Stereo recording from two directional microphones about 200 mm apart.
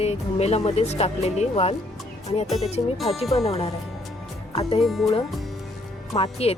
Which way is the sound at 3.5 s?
30° left (ahead or behind).